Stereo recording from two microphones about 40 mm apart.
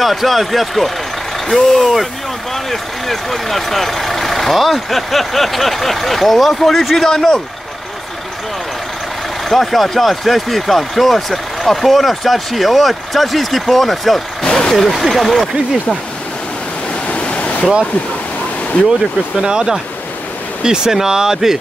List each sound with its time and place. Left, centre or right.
0.0 s speech: centre
9.5 s speech: centre
14.4 s vehicle: centre
14.8 s speech: centre
17.1 s waves: left
19.4 s speech: centre